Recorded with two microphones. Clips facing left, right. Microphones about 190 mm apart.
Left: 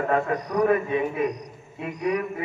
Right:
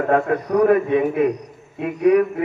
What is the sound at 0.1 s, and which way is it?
A man's voice, 60° right (ahead or behind).